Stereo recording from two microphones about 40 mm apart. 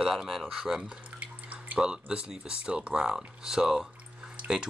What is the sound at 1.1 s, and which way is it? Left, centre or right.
Drip, right.